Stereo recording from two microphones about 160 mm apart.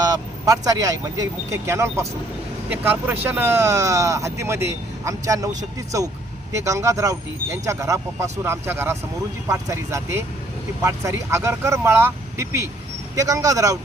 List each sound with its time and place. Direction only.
0.0 s speech: 20° right (ahead or behind)
6.5 s speech: 20° right (ahead or behind)